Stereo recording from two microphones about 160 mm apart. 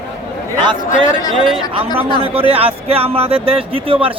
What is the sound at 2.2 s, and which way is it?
Speech, 35° right (ahead or behind).